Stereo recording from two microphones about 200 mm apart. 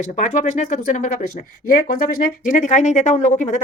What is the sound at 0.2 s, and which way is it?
Speech, 40° left (ahead or behind).